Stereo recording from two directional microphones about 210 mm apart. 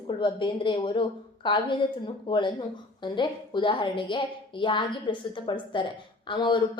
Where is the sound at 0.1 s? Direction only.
25° left (ahead or behind).